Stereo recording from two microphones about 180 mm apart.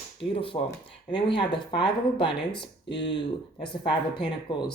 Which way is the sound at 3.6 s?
30° left (ahead or behind).